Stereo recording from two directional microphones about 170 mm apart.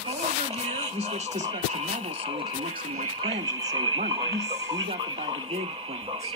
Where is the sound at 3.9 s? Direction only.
35° right (ahead or behind).